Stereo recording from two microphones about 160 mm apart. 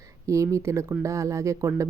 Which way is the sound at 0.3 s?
20° right (ahead or behind).